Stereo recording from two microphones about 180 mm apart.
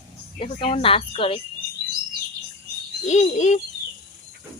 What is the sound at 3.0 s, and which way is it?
Speech, 40° left (ahead or behind).